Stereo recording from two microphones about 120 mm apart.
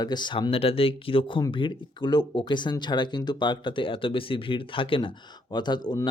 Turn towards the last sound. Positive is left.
turn(degrees=35)  # may be behind; listen again after turning